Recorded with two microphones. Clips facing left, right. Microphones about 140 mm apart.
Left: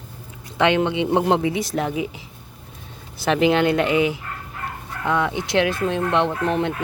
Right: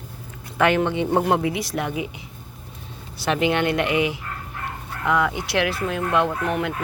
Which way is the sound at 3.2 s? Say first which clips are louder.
Left 3 dB; 35° left (ahead or behind).